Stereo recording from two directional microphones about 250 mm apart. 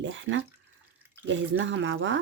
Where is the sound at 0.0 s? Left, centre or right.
Right.